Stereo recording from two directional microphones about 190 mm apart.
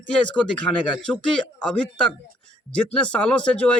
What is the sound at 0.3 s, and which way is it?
Speech, 5° left (ahead or behind).